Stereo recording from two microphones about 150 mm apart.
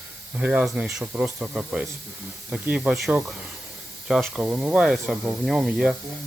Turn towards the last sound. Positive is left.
turn(degrees=-5)  # may be behind; listen again after turning